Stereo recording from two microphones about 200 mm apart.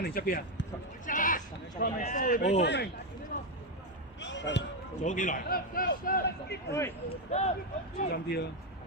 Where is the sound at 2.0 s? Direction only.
40° left (ahead or behind).